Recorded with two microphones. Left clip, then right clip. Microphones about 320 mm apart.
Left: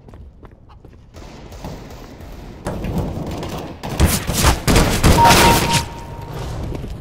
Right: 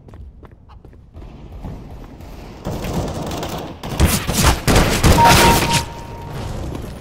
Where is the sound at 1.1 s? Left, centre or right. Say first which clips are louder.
Left 4 dB; left.